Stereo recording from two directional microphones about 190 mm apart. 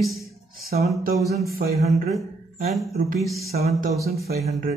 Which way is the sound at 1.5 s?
55° right (ahead or behind).